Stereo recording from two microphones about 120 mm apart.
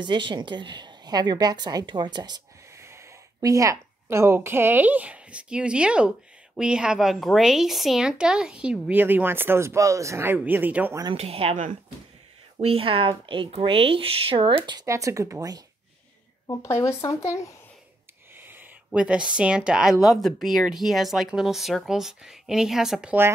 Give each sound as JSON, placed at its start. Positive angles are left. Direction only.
{"t": 0.0, "sound": "a woman's voice", "side_deg": -40}
{"t": 2.7, "sound": "snort", "side_deg": -25}
{"t": 3.3, "sound": "a woman's voice", "side_deg": -30}
{"t": 11.1, "sound": "speech", "side_deg": -55}
{"t": 12.6, "sound": "speech", "side_deg": -50}
{"t": 14.9, "sound": "speech", "side_deg": -25}
{"t": 16.4, "sound": "speech", "side_deg": 25}
{"t": 18.3, "sound": "a sound", "side_deg": -15}
{"t": 18.9, "sound": "a woman's voice", "side_deg": -10}